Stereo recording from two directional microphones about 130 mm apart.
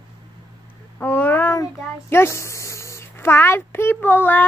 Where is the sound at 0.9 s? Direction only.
15° left (ahead or behind).